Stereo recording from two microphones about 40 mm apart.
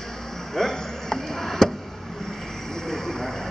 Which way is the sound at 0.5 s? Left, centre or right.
Centre.